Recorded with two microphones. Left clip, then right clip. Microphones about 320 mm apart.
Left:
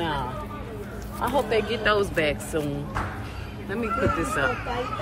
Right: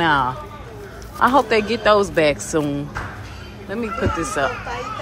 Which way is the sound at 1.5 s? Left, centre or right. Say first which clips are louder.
Right 7 dB; centre.